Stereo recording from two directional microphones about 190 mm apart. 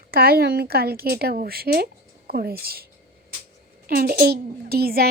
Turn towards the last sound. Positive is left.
turn(degrees=-55)  # may be behind; listen again after turning